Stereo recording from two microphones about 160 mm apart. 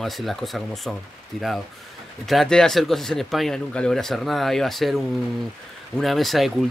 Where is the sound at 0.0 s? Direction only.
Centre (ahead or behind).